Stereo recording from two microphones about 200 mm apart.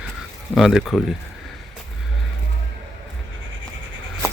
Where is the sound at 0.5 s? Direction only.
Centre (ahead or behind).